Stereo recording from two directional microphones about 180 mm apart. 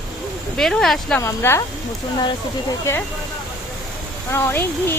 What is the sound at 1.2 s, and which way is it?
Speech, 15° left (ahead or behind).